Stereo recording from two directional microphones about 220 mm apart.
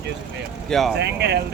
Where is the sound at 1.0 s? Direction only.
50° right (ahead or behind).